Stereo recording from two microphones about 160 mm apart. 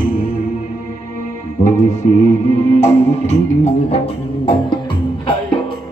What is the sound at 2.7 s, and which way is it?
Music, 45° left (ahead or behind).